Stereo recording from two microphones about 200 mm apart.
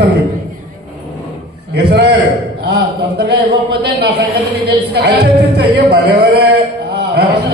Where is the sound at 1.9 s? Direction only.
60° right (ahead or behind).